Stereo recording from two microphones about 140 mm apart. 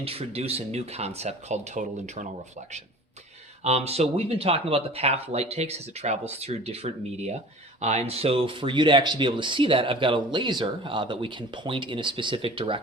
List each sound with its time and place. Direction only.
0.0 s speech: 45° right (ahead or behind)
3.6 s speech: 50° right (ahead or behind)